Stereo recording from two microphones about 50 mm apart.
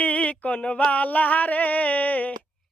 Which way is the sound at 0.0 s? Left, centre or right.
Left.